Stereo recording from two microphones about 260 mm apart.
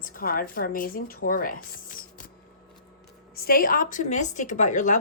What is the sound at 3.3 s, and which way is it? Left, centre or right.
A woman's voice, left.